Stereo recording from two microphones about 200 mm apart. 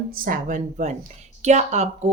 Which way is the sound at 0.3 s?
40° right (ahead or behind).